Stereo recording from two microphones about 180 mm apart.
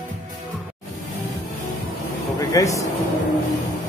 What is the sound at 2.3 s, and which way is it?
Speech, 20° left (ahead or behind).